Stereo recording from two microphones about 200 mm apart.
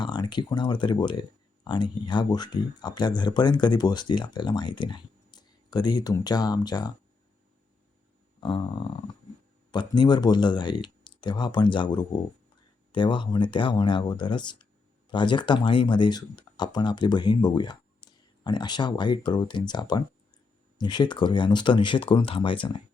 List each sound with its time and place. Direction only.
0.0 s speech: 20° left (ahead or behind)
8.4 s speech: 25° left (ahead or behind)